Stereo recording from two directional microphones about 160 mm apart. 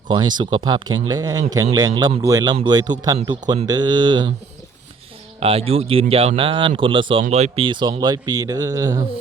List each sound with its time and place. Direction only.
0.1 s speech: 30° right (ahead or behind)
5.4 s speech: 35° right (ahead or behind)